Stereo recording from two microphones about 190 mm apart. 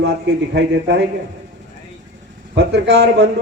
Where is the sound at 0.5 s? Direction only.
65° right (ahead or behind).